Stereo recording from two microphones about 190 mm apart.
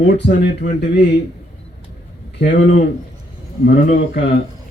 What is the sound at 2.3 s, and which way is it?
Speech, 65° left (ahead or behind).